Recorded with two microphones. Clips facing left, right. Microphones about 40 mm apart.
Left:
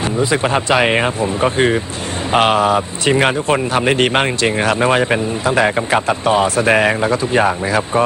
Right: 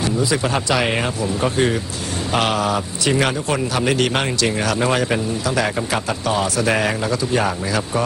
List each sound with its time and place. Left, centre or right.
0.0 s speech: left